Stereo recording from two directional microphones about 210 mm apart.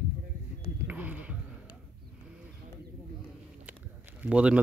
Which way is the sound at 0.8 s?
5° right (ahead or behind).